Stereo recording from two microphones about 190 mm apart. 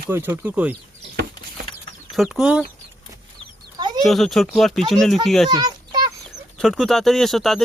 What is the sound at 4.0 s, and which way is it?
Speech, centre (ahead or behind).